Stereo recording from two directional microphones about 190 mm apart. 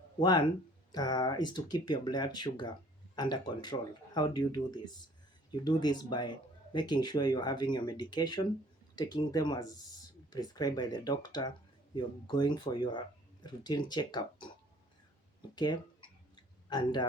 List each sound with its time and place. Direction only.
0.2 s speech: 20° left (ahead or behind)